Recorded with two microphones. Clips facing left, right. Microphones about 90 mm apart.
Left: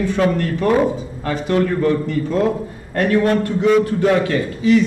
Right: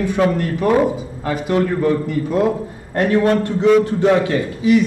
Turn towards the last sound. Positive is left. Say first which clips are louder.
# even
turn(degrees=-15)  # may be behind; listen again after turning